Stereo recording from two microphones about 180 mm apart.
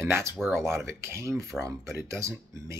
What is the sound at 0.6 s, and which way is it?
Speech, 15° right (ahead or behind).